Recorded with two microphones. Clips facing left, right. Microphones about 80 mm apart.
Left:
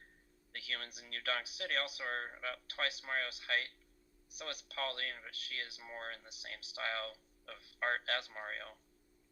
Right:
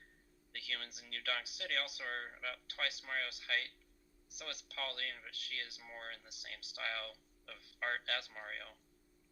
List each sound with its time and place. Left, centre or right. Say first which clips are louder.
0.5 s speech: left 2 dB; left